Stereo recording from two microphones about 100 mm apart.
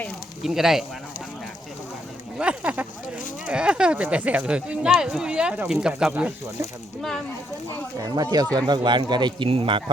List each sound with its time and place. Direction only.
0.4 s speech: 5° right (ahead or behind)
2.4 s speech: 10° right (ahead or behind)
7.9 s speech: 40° right (ahead or behind)
9.5 s speech: 60° right (ahead or behind)